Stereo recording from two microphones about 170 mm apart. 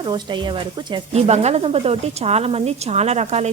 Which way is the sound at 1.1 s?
40° right (ahead or behind).